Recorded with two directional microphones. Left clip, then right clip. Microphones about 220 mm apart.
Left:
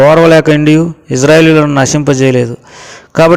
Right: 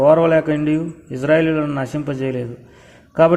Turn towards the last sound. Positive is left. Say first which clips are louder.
# left 6 dB
turn(degrees=40)  # may be behind; listen again after turning